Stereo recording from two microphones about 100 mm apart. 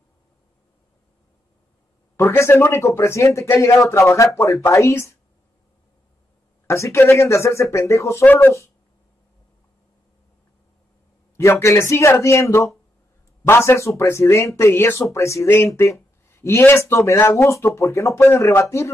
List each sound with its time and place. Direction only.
2.1 s speech: 25° left (ahead or behind)
6.7 s speech: 30° left (ahead or behind)
11.3 s speech: 25° left (ahead or behind)